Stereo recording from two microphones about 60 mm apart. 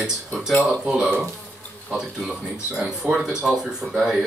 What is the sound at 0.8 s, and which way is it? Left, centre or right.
Speech, centre.